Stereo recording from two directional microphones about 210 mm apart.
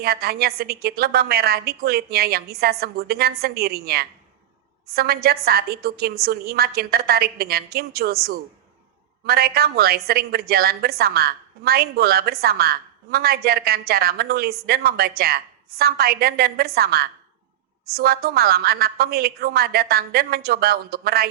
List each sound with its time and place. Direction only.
0.0 s a woman's voice: 45° right (ahead or behind)